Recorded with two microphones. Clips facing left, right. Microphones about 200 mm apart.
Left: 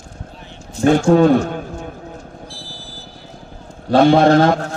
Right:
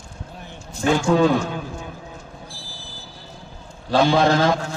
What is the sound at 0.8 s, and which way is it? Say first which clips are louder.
Speech: left 6 dB; 55° left (ahead or behind).